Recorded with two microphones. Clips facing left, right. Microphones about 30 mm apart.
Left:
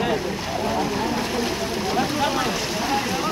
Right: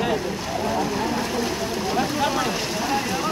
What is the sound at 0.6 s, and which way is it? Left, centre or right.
Vehicle, centre.